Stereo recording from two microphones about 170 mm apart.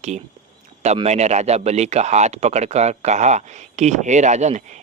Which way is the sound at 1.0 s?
40° right (ahead or behind).